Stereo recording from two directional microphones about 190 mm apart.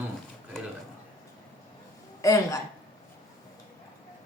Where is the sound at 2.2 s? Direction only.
15° left (ahead or behind).